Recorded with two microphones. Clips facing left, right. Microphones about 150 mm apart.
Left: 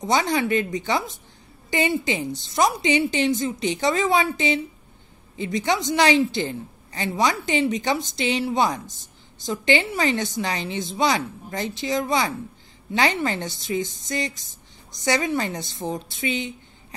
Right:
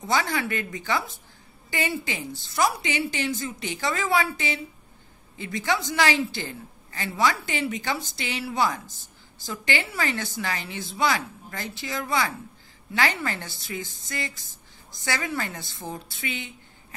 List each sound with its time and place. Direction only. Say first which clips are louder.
0.0 s a woman's voice: left 4 dB; 20° left (ahead or behind)